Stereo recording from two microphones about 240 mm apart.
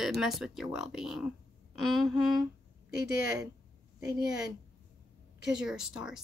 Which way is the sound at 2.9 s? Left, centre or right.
Left.